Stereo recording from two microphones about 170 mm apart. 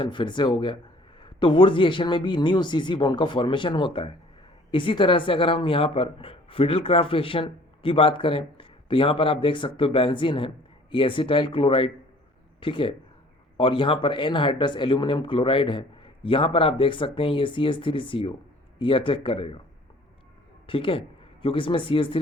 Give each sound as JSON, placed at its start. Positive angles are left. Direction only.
{"t": 0.0, "sound": "a man's voice", "side_deg": 30}
{"t": 20.7, "sound": "speech", "side_deg": 30}